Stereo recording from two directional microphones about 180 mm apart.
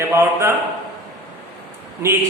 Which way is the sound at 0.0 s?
15° right (ahead or behind).